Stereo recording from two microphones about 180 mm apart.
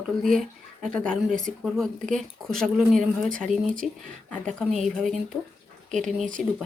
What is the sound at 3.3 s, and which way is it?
Speech, 50° right (ahead or behind).